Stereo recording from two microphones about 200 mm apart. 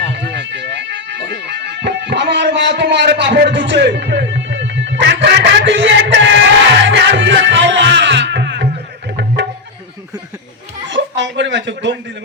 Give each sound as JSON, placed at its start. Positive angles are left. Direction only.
{"t": 0.1, "sound": "music", "side_deg": -60}
{"t": 10.8, "sound": "speech", "side_deg": -65}